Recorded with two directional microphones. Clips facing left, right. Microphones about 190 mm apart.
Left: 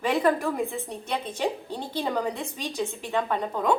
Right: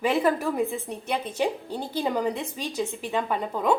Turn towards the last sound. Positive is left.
turn(degrees=-5)  # may be behind; listen again after turning